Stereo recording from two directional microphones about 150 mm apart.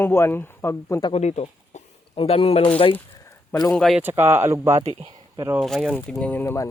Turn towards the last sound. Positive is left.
turn(degrees=15)  # may be behind; listen again after turning